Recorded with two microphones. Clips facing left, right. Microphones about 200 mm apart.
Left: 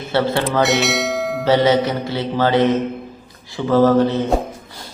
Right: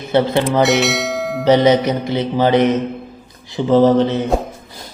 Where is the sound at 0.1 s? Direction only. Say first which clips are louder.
Right 3 dB; 15° right (ahead or behind).